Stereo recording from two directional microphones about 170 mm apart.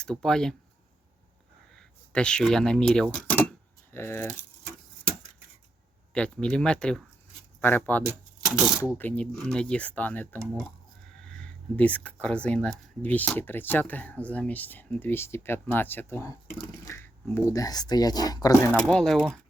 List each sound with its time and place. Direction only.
0.0 s speech: 5° left (ahead or behind)
1.7 s speech: 5° left (ahead or behind)
6.1 s speech: 5° left (ahead or behind)
8.0 s speech: 10° right (ahead or behind)
8.8 s speech: 15° left (ahead or behind)
11.2 s a sound: 5° left (ahead or behind)
12.2 s speech: 5° left (ahead or behind)
18.8 s speech: 5° left (ahead or behind)